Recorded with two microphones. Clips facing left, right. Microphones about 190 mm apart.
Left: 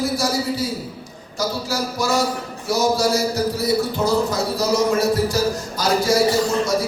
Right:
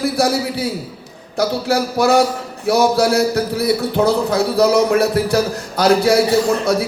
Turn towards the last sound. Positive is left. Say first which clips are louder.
# right 3 dB
turn(degrees=-60)  # may be behind; listen again after turning